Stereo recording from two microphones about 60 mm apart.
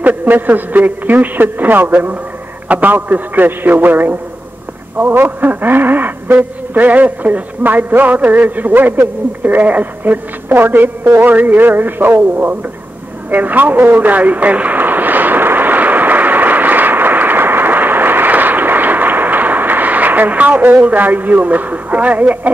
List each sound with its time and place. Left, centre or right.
0.0 s a man's voice: right
13.3 s vehicle: right